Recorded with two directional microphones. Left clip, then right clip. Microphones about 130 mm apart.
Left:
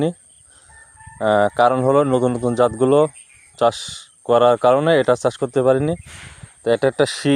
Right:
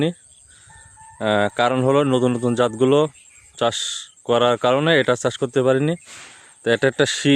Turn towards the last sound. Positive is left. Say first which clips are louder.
# left 1 dB
turn(degrees=-25)  # may be behind; listen again after turning